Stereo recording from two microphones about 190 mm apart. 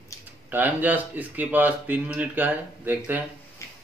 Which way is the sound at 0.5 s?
10° right (ahead or behind).